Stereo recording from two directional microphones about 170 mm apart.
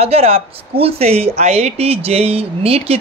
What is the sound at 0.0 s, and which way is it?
Speech, 35° right (ahead or behind).